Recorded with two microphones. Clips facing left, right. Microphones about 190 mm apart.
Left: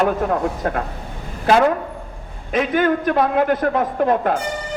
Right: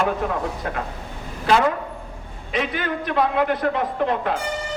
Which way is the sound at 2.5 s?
45° left (ahead or behind).